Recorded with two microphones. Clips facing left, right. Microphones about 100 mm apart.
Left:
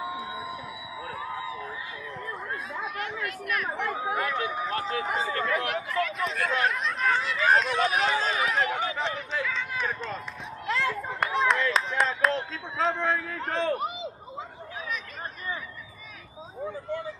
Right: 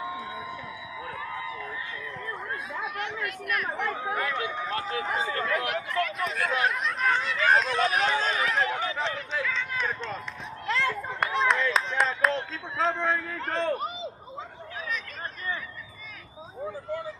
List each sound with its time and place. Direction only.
0.0 s a sound: 20° left (ahead or behind)
2.7 s chatter: centre (ahead or behind)
3.9 s speech: 15° left (ahead or behind)
4.7 s speech: 35° left (ahead or behind)
5.5 s speech: centre (ahead or behind)